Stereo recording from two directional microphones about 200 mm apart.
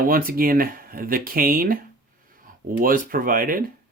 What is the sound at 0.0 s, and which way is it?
Speech, 45° right (ahead or behind).